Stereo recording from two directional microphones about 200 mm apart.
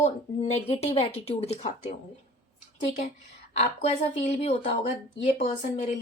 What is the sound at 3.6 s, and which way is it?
Speech, 30° left (ahead or behind).